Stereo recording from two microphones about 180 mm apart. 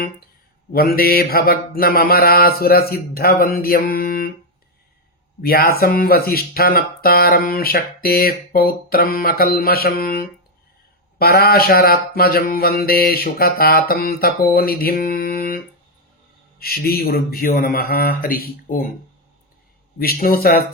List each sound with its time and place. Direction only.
0.7 s speech: 55° left (ahead or behind)
5.4 s speech: 60° left (ahead or behind)
20.0 s speech: 55° left (ahead or behind)